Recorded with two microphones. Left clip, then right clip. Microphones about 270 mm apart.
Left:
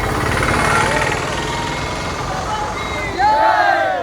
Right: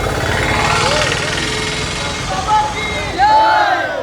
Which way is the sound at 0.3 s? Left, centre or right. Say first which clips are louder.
Right 1 dB; left.